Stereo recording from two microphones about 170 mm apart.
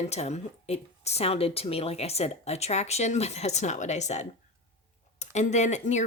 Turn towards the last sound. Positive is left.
turn(degrees=45)  # may be behind; listen again after turning